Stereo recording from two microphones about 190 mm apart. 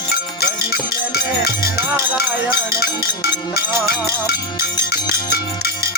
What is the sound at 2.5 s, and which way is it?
Music, 55° left (ahead or behind).